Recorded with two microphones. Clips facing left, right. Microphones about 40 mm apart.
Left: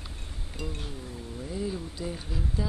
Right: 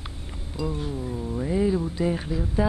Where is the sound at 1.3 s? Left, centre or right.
Right.